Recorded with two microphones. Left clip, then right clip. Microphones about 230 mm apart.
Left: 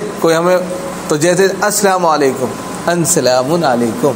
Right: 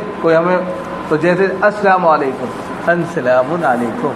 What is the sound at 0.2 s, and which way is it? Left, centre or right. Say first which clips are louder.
A man's voice: left 1 dB; left.